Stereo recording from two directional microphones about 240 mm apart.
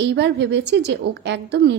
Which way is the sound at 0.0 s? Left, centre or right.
Right.